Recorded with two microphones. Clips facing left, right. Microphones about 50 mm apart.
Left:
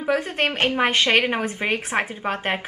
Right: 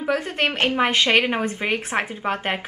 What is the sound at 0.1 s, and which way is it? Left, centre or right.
Speech, centre.